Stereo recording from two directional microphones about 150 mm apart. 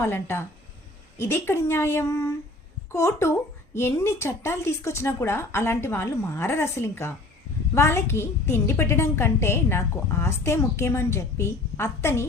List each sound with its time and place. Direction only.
0.0 s a woman's voice: 15° left (ahead or behind)